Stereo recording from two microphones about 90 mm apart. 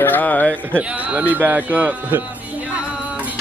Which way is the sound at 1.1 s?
15° right (ahead or behind).